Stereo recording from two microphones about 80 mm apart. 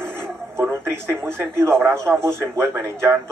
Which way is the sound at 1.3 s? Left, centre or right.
Right.